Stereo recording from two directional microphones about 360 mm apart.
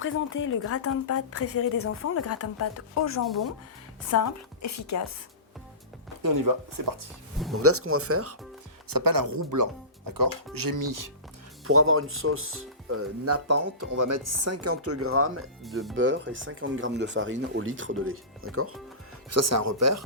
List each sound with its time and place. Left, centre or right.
0.0 s speech: left
6.2 s speech: right
7.5 s speech: right
8.9 s speech: right
10.1 s speech: right
11.6 s speech: right
13.9 s speech: right
15.6 s speech: centre
16.0 s speech: right